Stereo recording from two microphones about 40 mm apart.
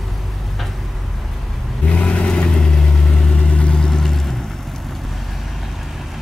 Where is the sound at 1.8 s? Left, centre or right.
Left.